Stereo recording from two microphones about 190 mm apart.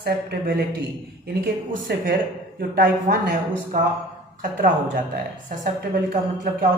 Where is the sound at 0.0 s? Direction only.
55° right (ahead or behind).